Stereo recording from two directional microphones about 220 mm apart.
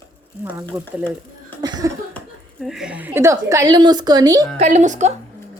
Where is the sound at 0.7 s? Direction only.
10° right (ahead or behind).